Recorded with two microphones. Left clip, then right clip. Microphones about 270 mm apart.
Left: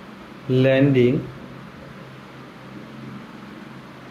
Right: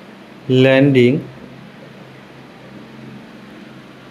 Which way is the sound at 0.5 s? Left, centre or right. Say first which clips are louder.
Right 6 dB; centre.